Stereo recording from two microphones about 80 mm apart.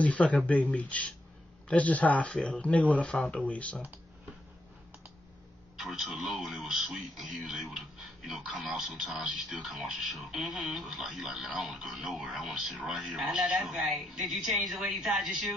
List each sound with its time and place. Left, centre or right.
0.0 s speech: centre
5.8 s speech: centre
6.3 s speech: centre